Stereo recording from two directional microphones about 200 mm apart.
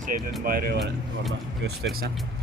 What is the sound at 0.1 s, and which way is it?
Speech, 40° right (ahead or behind).